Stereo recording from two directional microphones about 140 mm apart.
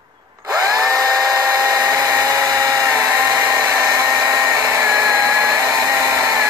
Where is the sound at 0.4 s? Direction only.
25° right (ahead or behind).